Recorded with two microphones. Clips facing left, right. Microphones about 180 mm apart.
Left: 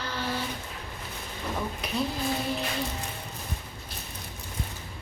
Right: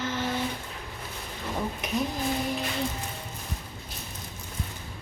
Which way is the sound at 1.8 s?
20° right (ahead or behind).